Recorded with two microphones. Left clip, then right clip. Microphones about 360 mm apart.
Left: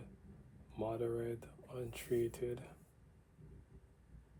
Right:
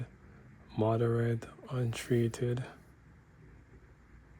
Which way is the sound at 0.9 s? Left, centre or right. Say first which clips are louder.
Right 8 dB; right.